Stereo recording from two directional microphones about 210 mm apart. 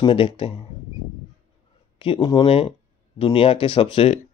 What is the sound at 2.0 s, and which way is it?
Speech, 25° left (ahead or behind).